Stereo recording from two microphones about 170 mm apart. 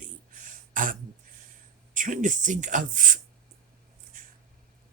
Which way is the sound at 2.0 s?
50° right (ahead or behind).